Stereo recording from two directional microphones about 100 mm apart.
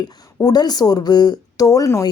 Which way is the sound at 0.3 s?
40° left (ahead or behind).